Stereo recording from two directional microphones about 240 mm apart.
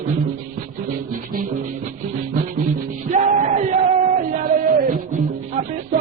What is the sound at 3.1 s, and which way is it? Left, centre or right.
Music, right.